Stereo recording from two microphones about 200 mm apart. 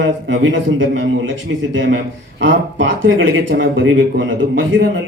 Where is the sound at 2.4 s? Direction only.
70° right (ahead or behind).